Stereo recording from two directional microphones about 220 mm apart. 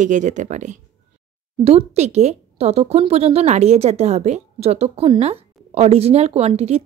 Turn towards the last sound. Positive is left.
turn(degrees=-30)  # may be behind; listen again after turning